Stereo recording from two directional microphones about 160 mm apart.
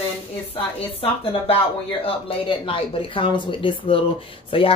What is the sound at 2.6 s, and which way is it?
Speech, 35° left (ahead or behind).